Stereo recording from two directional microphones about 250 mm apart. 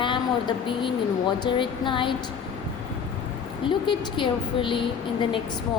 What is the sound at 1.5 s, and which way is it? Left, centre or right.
Speech, centre.